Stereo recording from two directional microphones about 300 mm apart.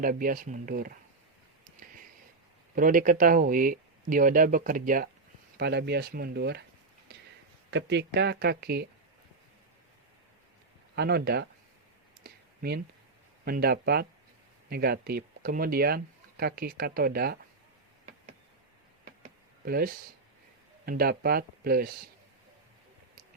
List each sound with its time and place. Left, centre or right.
0.0 s speech: right
2.7 s speech: right
7.7 s speech: right
10.9 s speech: right
12.2 s a sound: right
13.4 s speech: right
19.6 s speech: right